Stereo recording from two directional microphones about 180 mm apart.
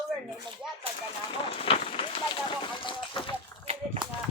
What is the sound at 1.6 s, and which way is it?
Run, 30° left (ahead or behind).